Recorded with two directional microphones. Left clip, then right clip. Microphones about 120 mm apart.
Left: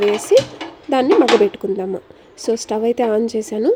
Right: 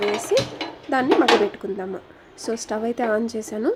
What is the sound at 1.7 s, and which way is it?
Speech, 25° left (ahead or behind).